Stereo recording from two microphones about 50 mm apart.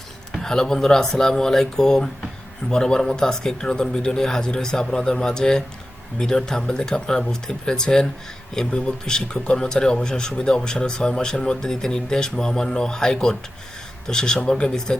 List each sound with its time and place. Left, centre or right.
0.3 s speech: centre